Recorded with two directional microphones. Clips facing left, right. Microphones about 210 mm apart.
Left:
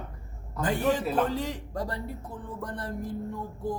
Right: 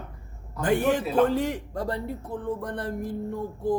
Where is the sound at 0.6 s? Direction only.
65° right (ahead or behind).